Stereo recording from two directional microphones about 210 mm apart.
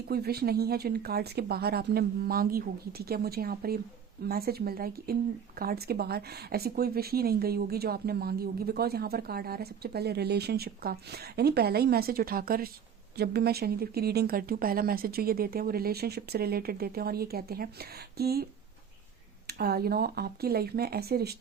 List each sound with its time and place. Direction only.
0.1 s speech: 50° right (ahead or behind)
19.5 s speech: 50° right (ahead or behind)